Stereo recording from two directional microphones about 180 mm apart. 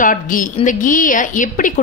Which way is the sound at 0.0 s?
50° left (ahead or behind).